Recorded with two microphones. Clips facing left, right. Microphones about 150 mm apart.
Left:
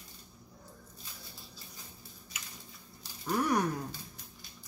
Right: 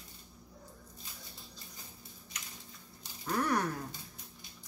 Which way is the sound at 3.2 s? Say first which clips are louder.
Left 2 dB; 10° left (ahead or behind).